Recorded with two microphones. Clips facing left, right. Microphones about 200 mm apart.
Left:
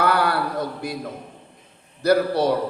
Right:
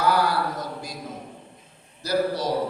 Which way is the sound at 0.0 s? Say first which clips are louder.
Left 1 dB; 60° left (ahead or behind).